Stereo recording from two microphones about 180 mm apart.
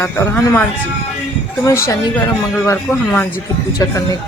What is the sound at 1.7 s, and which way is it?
A woman's voice, 15° left (ahead or behind).